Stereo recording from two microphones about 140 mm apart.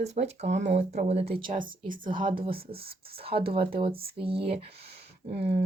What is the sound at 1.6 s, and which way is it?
Speech, 75° right (ahead or behind).